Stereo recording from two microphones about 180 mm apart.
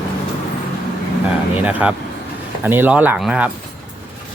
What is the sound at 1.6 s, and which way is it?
Speech, 5° right (ahead or behind).